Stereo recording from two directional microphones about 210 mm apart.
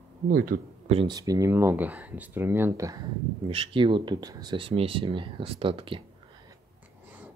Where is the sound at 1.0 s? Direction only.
20° right (ahead or behind).